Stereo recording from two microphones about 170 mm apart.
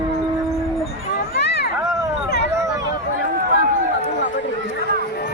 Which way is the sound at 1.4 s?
75° left (ahead or behind).